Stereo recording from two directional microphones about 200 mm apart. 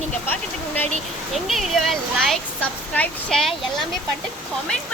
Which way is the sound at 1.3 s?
Centre (ahead or behind).